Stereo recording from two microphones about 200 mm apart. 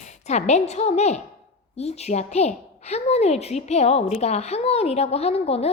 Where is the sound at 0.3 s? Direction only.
35° left (ahead or behind).